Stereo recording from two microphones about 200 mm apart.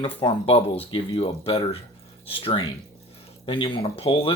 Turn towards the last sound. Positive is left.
turn(degrees=30)  # may be behind; listen again after turning